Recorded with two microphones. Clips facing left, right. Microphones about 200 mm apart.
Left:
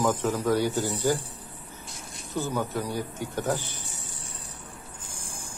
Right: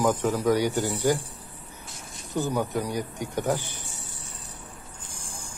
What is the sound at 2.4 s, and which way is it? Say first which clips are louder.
Speech: right 2 dB; 15° right (ahead or behind).